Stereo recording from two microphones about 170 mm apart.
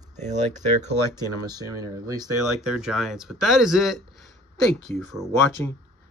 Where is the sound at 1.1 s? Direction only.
25° right (ahead or behind).